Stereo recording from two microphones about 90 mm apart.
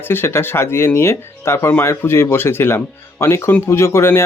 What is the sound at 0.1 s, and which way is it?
Speech, 25° left (ahead or behind).